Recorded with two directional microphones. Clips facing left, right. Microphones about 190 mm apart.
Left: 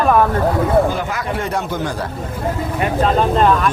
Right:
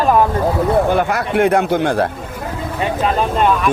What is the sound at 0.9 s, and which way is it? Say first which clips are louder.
A man's voice: right 6 dB; 65° right (ahead or behind).